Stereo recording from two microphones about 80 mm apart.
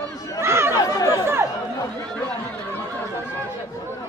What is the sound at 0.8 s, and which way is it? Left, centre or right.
Chatter, left.